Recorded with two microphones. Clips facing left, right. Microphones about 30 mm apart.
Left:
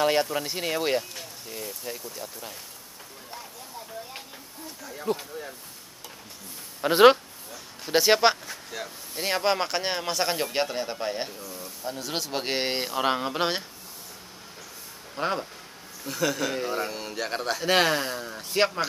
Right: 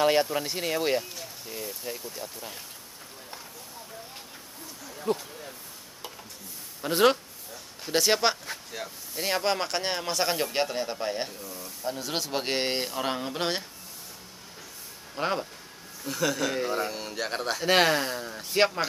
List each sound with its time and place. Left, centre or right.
0.0 s speech: centre
5.1 s speech: centre
6.8 s speech: left
7.8 s a sound: centre
8.7 s speech: centre
12.9 s a sound: centre
15.1 s speech: centre